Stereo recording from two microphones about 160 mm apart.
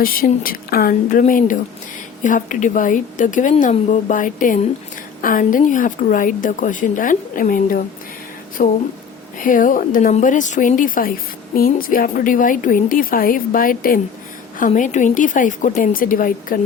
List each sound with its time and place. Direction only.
0.0 s a woman's voice: 65° left (ahead or behind)